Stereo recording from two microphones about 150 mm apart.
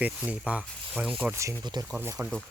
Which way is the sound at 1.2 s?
15° right (ahead or behind).